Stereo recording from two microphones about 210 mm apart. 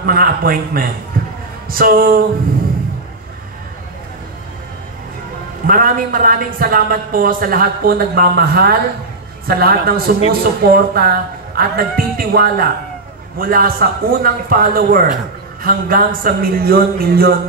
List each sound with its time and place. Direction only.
0.0 s speech: 45° right (ahead or behind)
1.1 s a sound: 45° right (ahead or behind)
1.7 s speech: 45° right (ahead or behind)
5.7 s speech: 40° right (ahead or behind)